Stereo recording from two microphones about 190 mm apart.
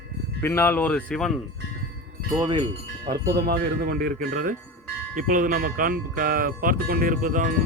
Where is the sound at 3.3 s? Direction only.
60° right (ahead or behind).